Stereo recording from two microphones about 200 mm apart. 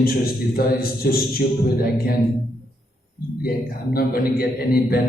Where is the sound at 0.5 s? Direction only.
50° left (ahead or behind).